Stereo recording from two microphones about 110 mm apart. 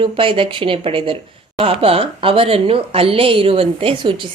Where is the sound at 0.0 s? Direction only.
50° right (ahead or behind).